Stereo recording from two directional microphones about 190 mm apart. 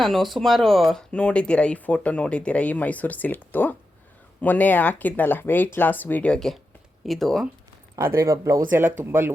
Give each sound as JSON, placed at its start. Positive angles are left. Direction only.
{"t": 0.0, "sound": "speech", "side_deg": 0}
{"t": 7.9, "sound": "speech", "side_deg": -15}